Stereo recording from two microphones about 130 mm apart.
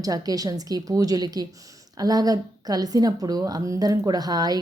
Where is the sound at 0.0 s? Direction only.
30° right (ahead or behind).